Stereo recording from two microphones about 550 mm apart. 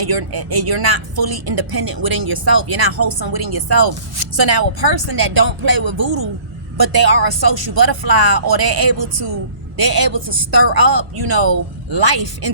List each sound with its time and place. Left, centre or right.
0.0 s speech: right